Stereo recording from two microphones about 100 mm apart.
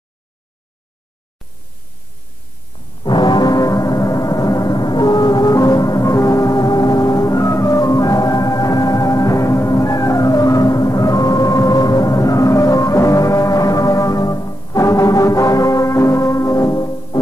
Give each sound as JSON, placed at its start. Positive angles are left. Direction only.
{"t": 3.0, "sound": "music", "side_deg": 50}